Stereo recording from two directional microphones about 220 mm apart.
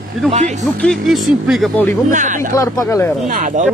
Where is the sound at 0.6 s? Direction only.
Centre (ahead or behind).